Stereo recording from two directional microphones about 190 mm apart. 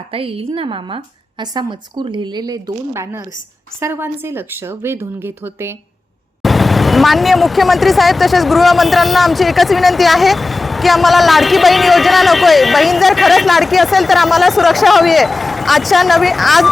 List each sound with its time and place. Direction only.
0.1 s a woman's voice: 30° right (ahead or behind); by 5.7 s 15° right (ahead or behind)
6.4 s speech: centre (ahead or behind)